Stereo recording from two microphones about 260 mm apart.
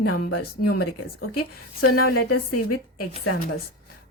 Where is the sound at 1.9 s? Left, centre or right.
Left.